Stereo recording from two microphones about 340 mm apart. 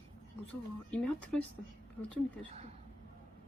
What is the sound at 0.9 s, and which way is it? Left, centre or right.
Child singing, centre.